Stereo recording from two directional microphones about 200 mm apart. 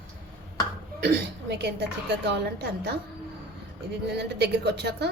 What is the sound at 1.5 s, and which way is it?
A woman's voice, 55° right (ahead or behind).